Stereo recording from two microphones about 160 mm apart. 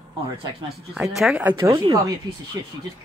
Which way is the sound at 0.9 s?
Centre (ahead or behind).